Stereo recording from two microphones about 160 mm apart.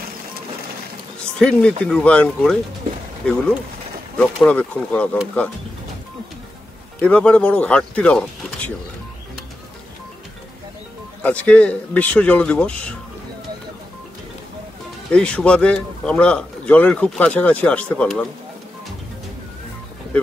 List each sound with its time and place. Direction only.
1.4 s speech: 5° left (ahead or behind)
7.0 s speech: 5° left (ahead or behind)
11.2 s speech: 10° left (ahead or behind)
15.1 s speech: 5° left (ahead or behind)